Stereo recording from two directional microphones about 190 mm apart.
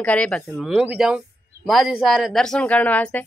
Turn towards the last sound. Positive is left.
turn(degrees=10)  # may be behind; listen again after turning